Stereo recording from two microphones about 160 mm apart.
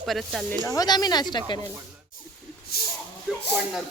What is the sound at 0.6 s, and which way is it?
Speech, 20° left (ahead or behind).